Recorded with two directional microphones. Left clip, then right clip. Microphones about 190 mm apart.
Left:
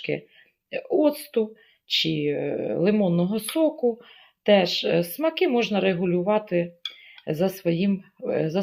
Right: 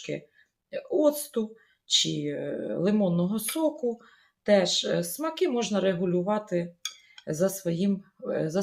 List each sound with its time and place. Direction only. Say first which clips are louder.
0.7 s speech: left 2 dB; 25° left (ahead or behind)